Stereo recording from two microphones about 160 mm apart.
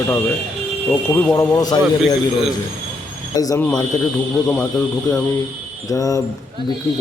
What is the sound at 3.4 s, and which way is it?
Speech, 20° left (ahead or behind).